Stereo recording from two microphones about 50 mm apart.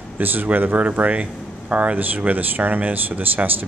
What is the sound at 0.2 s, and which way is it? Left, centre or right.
Speech, right.